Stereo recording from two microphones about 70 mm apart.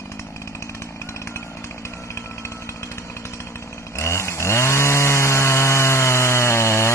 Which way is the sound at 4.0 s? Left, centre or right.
Left.